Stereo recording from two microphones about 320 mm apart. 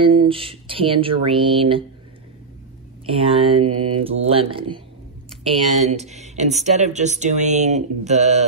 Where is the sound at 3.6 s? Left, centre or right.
Right.